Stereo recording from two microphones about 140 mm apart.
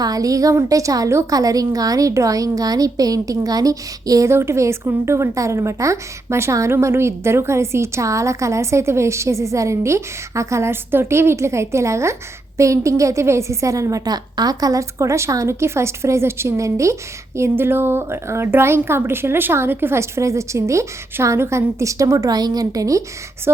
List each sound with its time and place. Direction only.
0.0 s a woman's voice: 25° right (ahead or behind)